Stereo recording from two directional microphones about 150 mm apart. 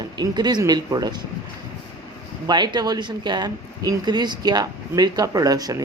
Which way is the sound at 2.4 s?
30° right (ahead or behind).